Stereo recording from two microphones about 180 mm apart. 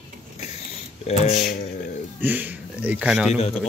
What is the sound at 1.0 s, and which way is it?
Speech, 40° left (ahead or behind).